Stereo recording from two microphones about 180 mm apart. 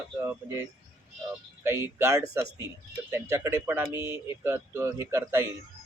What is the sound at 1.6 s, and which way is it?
Speech, 15° right (ahead or behind).